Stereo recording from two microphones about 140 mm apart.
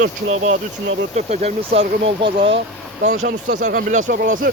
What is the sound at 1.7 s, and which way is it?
Speech, 35° right (ahead or behind).